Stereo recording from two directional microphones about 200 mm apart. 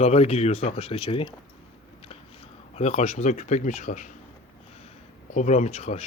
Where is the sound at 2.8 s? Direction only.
35° left (ahead or behind).